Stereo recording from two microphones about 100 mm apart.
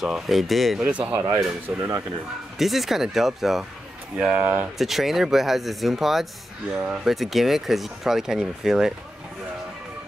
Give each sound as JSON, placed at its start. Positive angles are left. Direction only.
{"t": 0.0, "sound": "speech", "side_deg": -5}
{"t": 0.8, "sound": "speech", "side_deg": -15}
{"t": 1.2, "sound": "speech", "side_deg": -30}
{"t": 2.6, "sound": "speech", "side_deg": 0}
{"t": 4.2, "sound": "speech", "side_deg": -10}
{"t": 4.7, "sound": "speech", "side_deg": 0}